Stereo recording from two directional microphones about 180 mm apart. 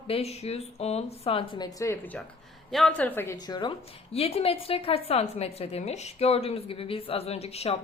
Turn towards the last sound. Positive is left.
turn(degrees=35)  # may be behind; listen again after turning